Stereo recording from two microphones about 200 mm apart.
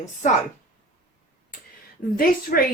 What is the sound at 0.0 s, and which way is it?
Speech, 35° left (ahead or behind).